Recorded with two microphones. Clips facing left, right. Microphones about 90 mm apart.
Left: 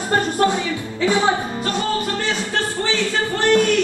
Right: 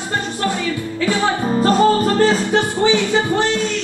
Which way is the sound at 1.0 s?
20° left (ahead or behind).